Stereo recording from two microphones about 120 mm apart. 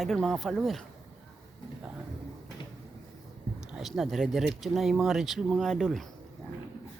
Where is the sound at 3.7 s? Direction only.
Centre (ahead or behind).